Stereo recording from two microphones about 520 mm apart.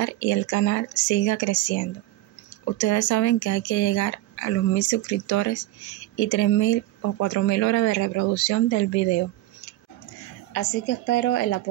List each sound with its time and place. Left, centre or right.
0.0 s speech: left
10.5 s a woman's voice: centre